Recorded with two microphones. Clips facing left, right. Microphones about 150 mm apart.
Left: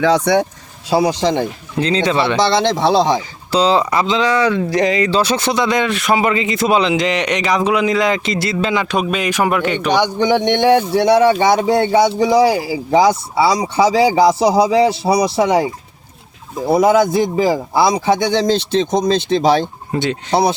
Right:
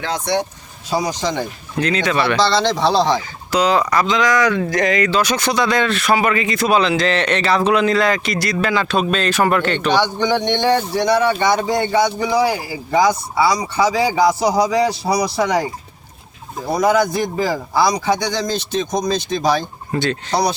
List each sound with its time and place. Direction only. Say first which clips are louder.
1.2 s speech: left 5 dB; 25° left (ahead or behind)
16.6 s speech: left 4 dB; 25° left (ahead or behind)